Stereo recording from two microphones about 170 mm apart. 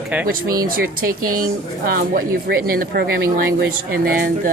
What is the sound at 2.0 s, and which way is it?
Speech, 55° right (ahead or behind).